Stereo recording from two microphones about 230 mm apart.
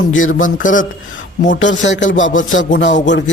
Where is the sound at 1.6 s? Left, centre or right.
Left.